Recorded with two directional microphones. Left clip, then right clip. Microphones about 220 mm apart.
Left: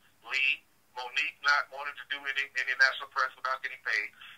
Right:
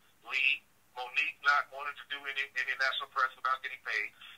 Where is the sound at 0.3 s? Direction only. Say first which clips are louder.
Left 1 dB; 30° left (ahead or behind).